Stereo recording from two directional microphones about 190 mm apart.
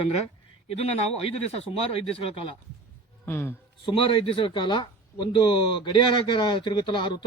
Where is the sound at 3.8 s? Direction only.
25° left (ahead or behind).